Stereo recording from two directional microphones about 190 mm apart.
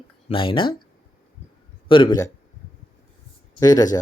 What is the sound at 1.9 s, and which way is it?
Speech, 25° left (ahead or behind).